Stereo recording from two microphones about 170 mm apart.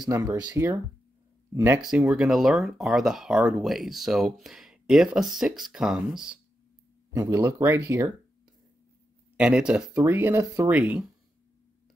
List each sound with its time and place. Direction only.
0.0 s speech: 20° right (ahead or behind); by 6.4 s 5° right (ahead or behind)
7.1 s speech: 15° right (ahead or behind)
9.4 s speech: 5° right (ahead or behind)
10.7 s speech: 5° right (ahead or behind)